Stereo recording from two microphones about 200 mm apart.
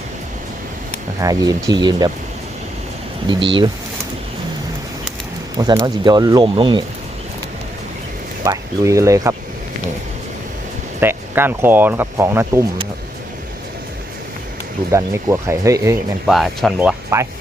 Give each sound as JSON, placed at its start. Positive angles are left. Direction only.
{"t": 1.2, "sound": "speech", "side_deg": -20}
{"t": 3.2, "sound": "speech", "side_deg": -25}
{"t": 5.5, "sound": "speech", "side_deg": -20}
{"t": 8.4, "sound": "speech", "side_deg": -15}
{"t": 11.0, "sound": "speech", "side_deg": -10}
{"t": 14.9, "sound": "speech", "side_deg": -15}
{"t": 16.2, "sound": "speech", "side_deg": 0}
{"t": 17.1, "sound": "speech", "side_deg": -15}